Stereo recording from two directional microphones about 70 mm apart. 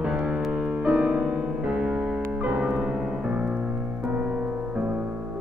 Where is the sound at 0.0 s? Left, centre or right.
Centre.